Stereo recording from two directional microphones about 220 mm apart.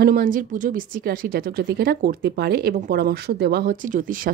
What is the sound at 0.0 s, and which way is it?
Speech, 40° right (ahead or behind).